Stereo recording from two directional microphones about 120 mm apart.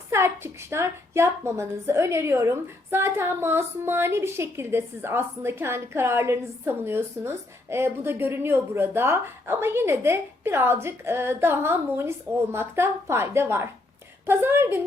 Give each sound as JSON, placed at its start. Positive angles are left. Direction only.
{"t": 0.1, "sound": "a woman's voice", "side_deg": -20}